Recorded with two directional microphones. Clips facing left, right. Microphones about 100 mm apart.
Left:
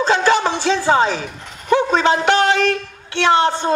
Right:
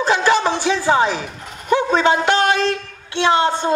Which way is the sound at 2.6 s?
20° right (ahead or behind).